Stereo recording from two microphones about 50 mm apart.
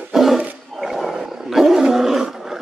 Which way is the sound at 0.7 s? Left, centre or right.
Centre.